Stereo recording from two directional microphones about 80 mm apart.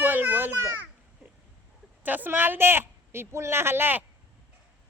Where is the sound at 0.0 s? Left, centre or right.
Right.